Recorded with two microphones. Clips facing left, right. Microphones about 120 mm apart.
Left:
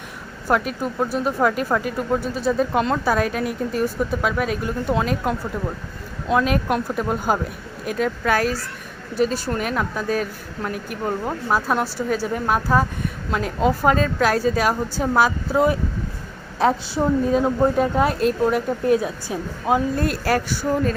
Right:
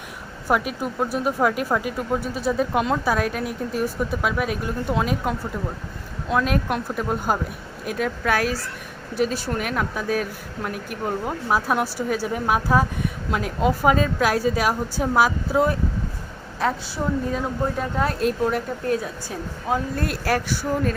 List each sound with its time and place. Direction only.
0.4 s speech: 5° right (ahead or behind)
16.6 s a woman's voice: 25° left (ahead or behind)
18.2 s speech: centre (ahead or behind)
18.9 s a woman's voice: 15° left (ahead or behind)
20.0 s speech: centre (ahead or behind)